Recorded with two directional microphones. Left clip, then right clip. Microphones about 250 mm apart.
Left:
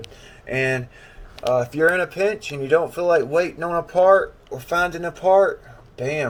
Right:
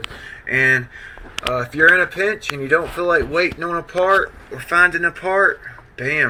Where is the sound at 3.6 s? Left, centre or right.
Right.